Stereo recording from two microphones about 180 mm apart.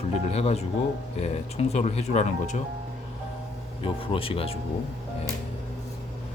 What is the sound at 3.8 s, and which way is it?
Speech, 30° left (ahead or behind).